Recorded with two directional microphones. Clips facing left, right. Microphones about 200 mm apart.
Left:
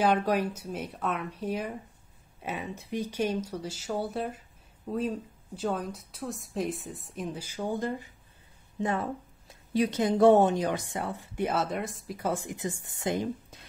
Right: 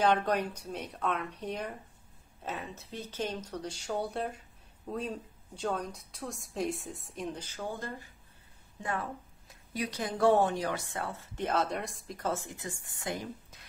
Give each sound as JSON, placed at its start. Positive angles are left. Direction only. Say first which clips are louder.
{"t": 0.0, "sound": "a woman's voice", "louder": "left 2 dB", "side_deg": 10}